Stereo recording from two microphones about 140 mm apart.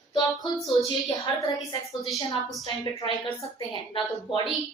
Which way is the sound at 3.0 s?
35° left (ahead or behind).